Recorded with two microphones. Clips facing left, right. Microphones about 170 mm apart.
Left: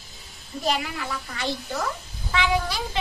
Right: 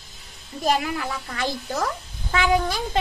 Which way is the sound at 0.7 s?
45° right (ahead or behind).